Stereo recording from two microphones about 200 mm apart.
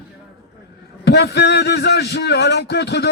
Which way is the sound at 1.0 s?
55° left (ahead or behind).